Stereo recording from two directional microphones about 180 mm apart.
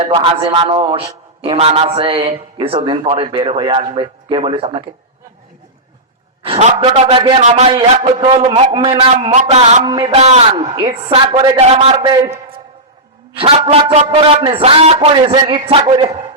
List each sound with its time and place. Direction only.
0.1 s a man's voice: 30° right (ahead or behind)
6.4 s a man's voice: 35° right (ahead or behind)
9.3 s a man's voice: 40° right (ahead or behind)
9.8 s a man's voice: 25° right (ahead or behind)
13.3 s a man's voice: 30° right (ahead or behind)